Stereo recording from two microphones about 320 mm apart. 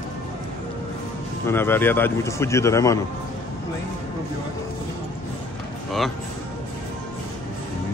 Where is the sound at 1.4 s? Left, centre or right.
Centre.